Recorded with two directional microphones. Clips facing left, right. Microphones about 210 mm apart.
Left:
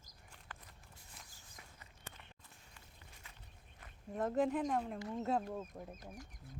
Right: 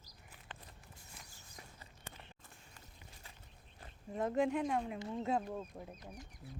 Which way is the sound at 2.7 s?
35° right (ahead or behind).